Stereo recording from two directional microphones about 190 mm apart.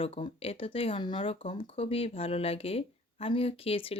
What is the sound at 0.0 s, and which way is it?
Speech, 30° left (ahead or behind).